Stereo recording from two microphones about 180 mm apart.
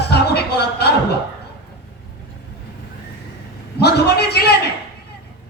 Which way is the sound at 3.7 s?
65° left (ahead or behind).